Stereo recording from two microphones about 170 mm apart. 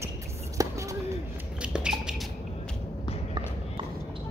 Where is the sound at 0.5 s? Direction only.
20° right (ahead or behind).